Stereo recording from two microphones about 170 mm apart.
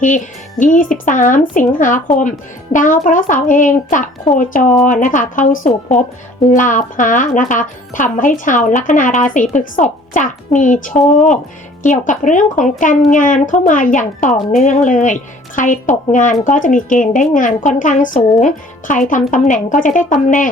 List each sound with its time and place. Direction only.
0.0 s speech: 50° left (ahead or behind)